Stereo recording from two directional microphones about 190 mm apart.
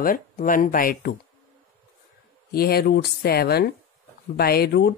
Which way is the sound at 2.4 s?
55° left (ahead or behind).